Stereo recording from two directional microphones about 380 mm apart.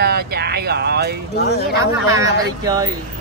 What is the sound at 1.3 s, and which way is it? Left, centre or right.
Speech, left.